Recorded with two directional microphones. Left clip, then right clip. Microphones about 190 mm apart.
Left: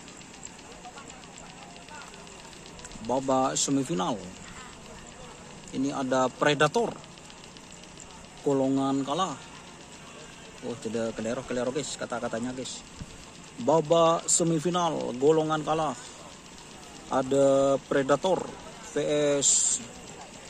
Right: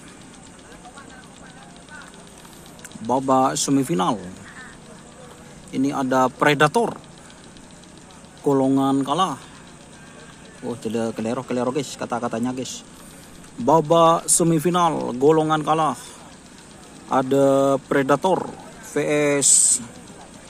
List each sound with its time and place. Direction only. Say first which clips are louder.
3.1 s speech: right 7 dB; 10° right (ahead or behind)
5.7 s speech: right 7 dB; 10° right (ahead or behind)
8.5 s speech: right 7 dB; 10° right (ahead or behind)
10.8 s speech: right 6 dB; 10° right (ahead or behind)
13.7 s speech: right 7 dB; 10° right (ahead or behind)
17.1 s speech: right 5 dB; 10° right (ahead or behind)